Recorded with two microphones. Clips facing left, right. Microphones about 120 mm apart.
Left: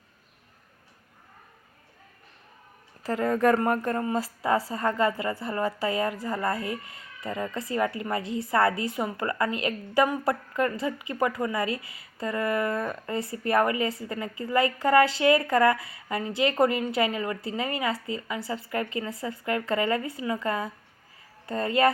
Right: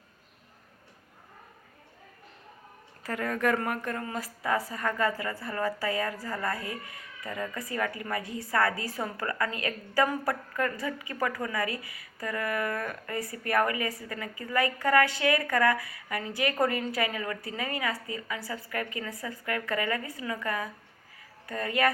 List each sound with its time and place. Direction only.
3.0 s a woman's voice: 30° left (ahead or behind)